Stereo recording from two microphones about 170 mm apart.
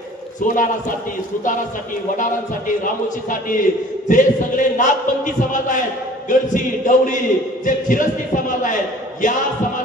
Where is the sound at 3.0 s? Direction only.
50° left (ahead or behind).